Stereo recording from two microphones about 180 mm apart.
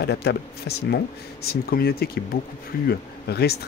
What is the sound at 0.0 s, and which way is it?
Speech, 65° left (ahead or behind).